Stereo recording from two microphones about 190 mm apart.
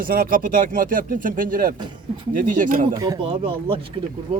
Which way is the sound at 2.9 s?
20° right (ahead or behind).